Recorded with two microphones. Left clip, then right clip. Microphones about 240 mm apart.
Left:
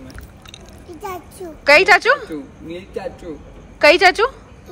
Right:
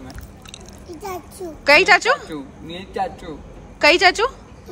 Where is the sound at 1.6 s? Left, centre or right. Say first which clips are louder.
Left 2 dB; centre.